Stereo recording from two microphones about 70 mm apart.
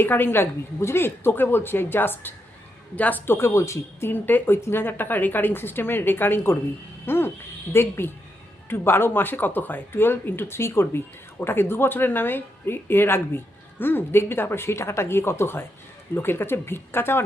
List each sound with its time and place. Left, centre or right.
0.0 s a man's voice: left
3.3 s speech: left
4.1 s speech: left